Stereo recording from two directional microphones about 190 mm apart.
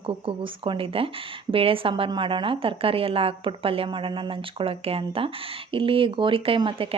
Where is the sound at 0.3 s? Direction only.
30° right (ahead or behind).